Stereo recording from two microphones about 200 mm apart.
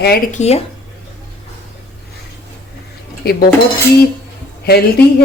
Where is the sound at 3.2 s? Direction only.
50° left (ahead or behind).